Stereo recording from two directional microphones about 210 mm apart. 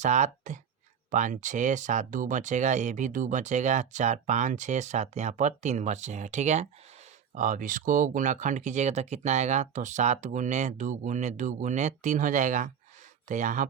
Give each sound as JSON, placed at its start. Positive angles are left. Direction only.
{"t": 0.0, "sound": "speech", "side_deg": -35}